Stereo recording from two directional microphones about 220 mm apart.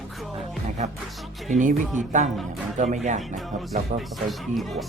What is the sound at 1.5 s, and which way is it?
Speech, 35° right (ahead or behind).